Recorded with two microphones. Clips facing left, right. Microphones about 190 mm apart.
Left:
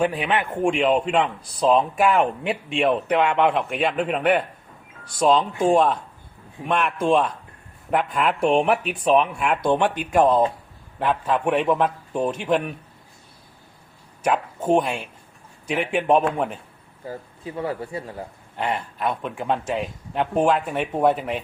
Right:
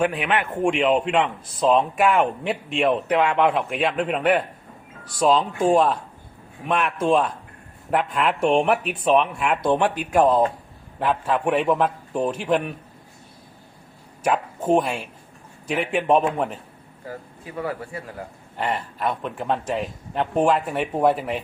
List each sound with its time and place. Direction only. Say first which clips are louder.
0.0 s speech: even; 20° left (ahead or behind)
0.6 s a man's voice: even; centre (ahead or behind)
14.3 s a man's voice: even; 5° right (ahead or behind)
17.1 s speech: left 3 dB; 25° left (ahead or behind)
18.5 s a man's voice: even; centre (ahead or behind)